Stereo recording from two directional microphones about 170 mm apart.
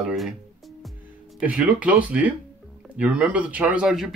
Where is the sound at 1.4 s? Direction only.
10° right (ahead or behind).